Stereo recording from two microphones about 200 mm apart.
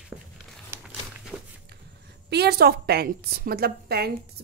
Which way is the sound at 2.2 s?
55° right (ahead or behind).